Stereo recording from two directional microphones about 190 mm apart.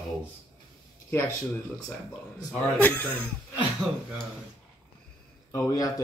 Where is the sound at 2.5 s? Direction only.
10° left (ahead or behind).